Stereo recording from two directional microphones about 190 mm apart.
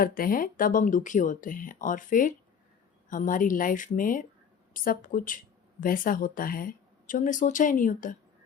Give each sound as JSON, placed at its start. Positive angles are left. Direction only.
{"t": 0.0, "sound": "speech", "side_deg": 50}